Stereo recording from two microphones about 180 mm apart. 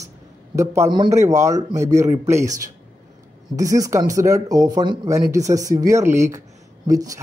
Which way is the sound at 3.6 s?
20° right (ahead or behind).